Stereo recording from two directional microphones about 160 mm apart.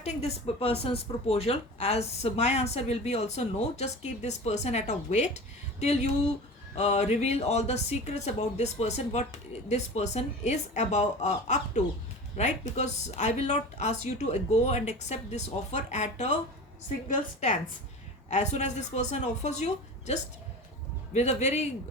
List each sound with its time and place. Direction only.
0.0 s speech: 40° left (ahead or behind)